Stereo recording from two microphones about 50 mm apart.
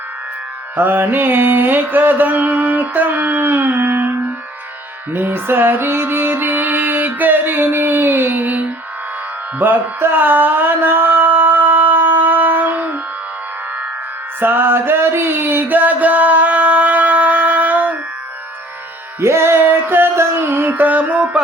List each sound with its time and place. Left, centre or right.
0.8 s music: right
14.4 s music: right
19.2 s music: right
19.6 s music: right
20.1 s music: right
20.7 s music: right